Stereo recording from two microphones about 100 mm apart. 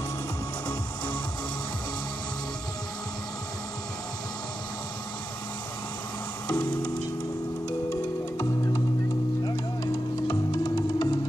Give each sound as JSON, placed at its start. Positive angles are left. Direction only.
{"t": 6.4, "sound": "music", "side_deg": 20}
{"t": 10.2, "sound": "music", "side_deg": 40}